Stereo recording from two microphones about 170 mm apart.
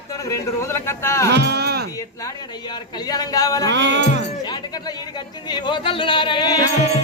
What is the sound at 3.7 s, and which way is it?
Music, 90° right.